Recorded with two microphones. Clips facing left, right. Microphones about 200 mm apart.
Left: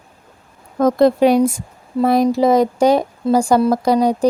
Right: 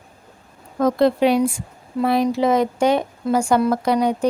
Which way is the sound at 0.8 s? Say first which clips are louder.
Left 4 dB; 45° left (ahead or behind).